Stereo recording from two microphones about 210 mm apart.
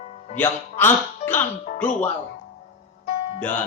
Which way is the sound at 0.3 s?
10° left (ahead or behind).